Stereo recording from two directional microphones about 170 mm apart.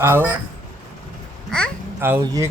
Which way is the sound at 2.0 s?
15° right (ahead or behind).